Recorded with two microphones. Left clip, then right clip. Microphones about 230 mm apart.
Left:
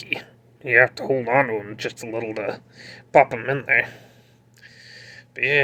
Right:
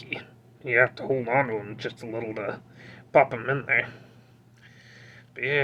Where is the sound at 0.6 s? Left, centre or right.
Centre.